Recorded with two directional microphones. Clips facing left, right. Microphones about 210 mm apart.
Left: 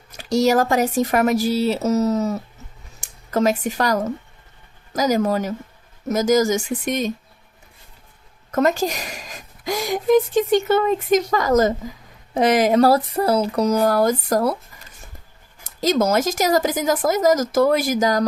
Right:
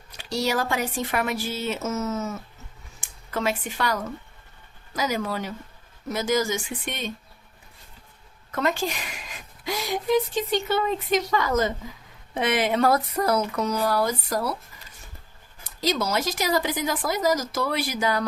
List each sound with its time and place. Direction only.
0.1 s a woman's voice: 45° left (ahead or behind)
8.5 s a woman's voice: 40° left (ahead or behind)
15.6 s a woman's voice: 45° left (ahead or behind)